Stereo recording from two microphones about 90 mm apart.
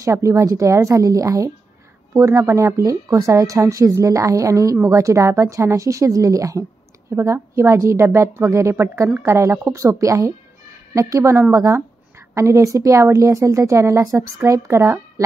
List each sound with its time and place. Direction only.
0.0 s a woman's voice: 35° right (ahead or behind)